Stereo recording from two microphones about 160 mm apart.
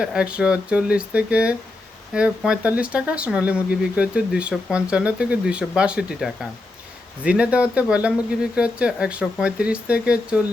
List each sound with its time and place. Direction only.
0.0 s speech: 5° right (ahead or behind)